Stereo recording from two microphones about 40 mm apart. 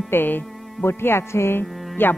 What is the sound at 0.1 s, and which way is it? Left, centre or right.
Speech, left.